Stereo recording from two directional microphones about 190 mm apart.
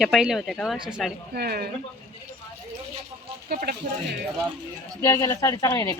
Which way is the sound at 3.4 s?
50° right (ahead or behind).